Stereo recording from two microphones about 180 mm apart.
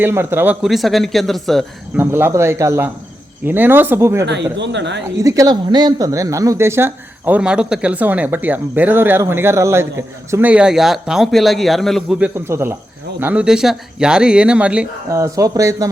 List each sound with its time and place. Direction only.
0.0 s speech: 15° right (ahead or behind)
2.0 s speech: 10° right (ahead or behind)
4.5 s speech: 75° right (ahead or behind)
5.1 s speech: 20° right (ahead or behind); by 12.3 s centre (ahead or behind)
12.5 s speech: 15° right (ahead or behind)
15.1 s speech: 15° right (ahead or behind)